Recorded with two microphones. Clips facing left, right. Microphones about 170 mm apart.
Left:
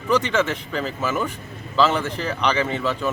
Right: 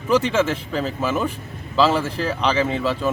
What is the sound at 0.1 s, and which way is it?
Speech, 5° right (ahead or behind).